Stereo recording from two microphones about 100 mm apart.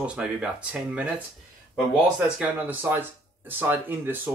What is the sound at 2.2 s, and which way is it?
Speech, 15° right (ahead or behind).